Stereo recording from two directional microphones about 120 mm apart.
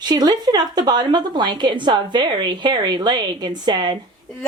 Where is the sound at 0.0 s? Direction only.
35° right (ahead or behind).